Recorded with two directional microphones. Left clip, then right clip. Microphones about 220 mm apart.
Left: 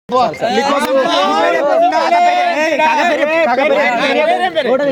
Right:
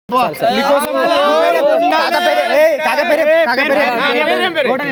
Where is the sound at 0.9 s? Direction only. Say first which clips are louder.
Even; 35° right (ahead or behind).